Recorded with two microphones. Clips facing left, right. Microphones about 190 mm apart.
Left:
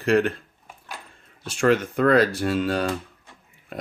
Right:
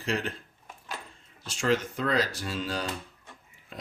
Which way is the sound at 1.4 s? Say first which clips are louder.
Left 7 dB; 60° left (ahead or behind).